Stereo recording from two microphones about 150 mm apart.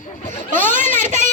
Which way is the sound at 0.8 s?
15° left (ahead or behind).